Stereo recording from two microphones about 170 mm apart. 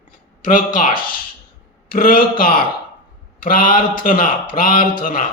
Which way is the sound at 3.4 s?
55° left (ahead or behind).